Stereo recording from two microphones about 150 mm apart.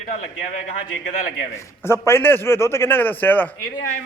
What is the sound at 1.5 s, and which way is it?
Speech, 15° left (ahead or behind).